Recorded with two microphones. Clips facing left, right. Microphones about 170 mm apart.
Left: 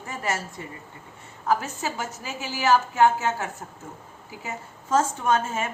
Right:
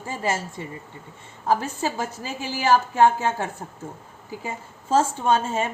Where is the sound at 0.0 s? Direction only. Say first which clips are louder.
Right 3 dB; 25° right (ahead or behind).